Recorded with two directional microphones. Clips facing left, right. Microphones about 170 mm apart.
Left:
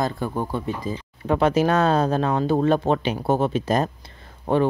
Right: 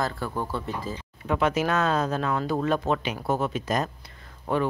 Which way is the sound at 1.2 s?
35° left (ahead or behind).